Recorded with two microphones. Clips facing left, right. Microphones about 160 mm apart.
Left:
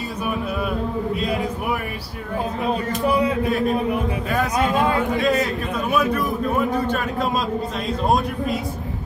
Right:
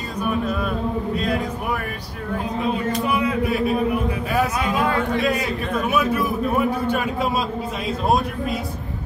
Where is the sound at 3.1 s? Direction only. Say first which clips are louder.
Left 5 dB; 35° left (ahead or behind).